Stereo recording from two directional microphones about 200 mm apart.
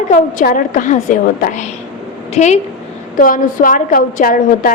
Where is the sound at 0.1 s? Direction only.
40° left (ahead or behind).